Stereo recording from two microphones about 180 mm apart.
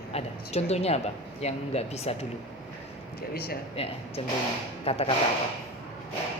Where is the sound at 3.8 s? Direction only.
35° left (ahead or behind).